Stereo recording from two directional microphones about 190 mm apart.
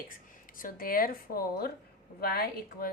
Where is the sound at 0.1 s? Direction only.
45° left (ahead or behind).